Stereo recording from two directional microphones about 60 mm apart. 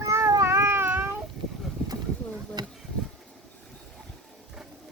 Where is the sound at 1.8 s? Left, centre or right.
Centre.